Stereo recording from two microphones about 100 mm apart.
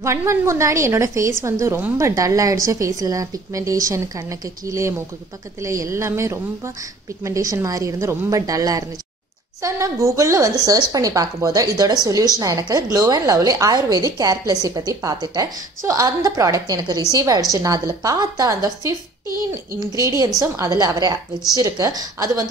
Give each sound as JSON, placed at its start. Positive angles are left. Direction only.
{"t": 0.0, "sound": "a woman's voice", "side_deg": -25}
{"t": 20.0, "sound": "a woman's voice", "side_deg": -35}